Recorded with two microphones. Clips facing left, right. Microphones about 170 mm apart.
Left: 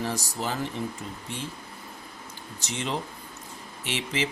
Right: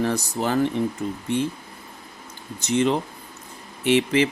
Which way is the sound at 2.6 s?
60° right (ahead or behind).